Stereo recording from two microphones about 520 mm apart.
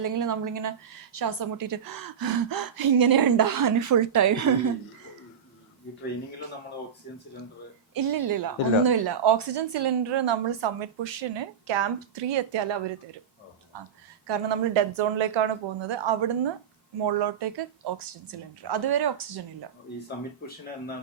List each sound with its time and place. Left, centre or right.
0.0 s a woman's voice: right
7.9 s a woman's voice: right
13.7 s a woman's voice: right